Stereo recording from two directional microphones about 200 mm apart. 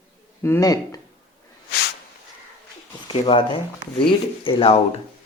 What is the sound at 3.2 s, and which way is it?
Speech, 25° left (ahead or behind).